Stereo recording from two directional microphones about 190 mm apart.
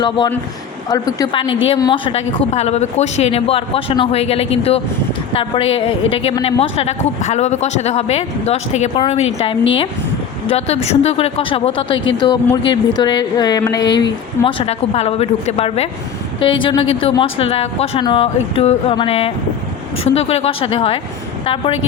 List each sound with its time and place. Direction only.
0.9 s a woman's voice: 20° left (ahead or behind)